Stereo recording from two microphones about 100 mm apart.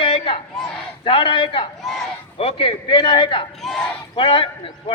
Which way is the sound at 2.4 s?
65° left (ahead or behind).